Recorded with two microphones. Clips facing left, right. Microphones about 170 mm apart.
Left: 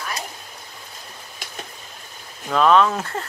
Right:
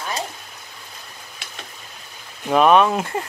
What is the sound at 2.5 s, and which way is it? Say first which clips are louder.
Speech: right 2 dB; 15° right (ahead or behind).